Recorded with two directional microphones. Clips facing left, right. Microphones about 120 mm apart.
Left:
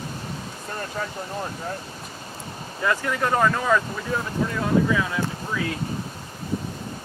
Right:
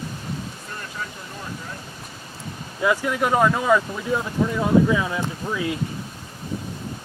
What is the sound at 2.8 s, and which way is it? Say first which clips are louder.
Speech: right 3 dB; 10° right (ahead or behind).